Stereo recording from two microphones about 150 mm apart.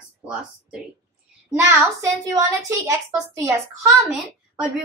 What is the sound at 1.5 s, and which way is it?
A woman's voice, 15° right (ahead or behind).